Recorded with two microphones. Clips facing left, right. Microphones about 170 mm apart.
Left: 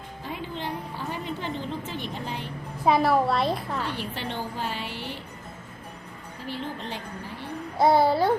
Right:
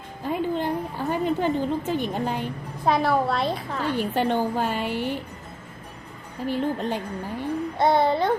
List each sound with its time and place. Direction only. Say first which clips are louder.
0.3 s a woman's voice: right 9 dB; 50° right (ahead or behind)
2.8 s a woman's voice: even; centre (ahead or behind)
3.9 s a woman's voice: right 9 dB; 50° right (ahead or behind)
6.5 s a woman's voice: right 8 dB; 45° right (ahead or behind)
7.8 s a woman's voice: left 1 dB; 5° left (ahead or behind)